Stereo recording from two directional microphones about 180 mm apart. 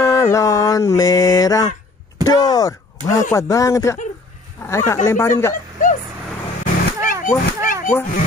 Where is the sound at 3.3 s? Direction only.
15° left (ahead or behind).